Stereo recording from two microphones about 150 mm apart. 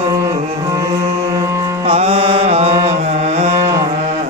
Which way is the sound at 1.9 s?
40° right (ahead or behind).